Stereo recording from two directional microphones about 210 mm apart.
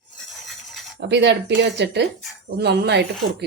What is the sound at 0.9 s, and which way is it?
Speech, 55° right (ahead or behind).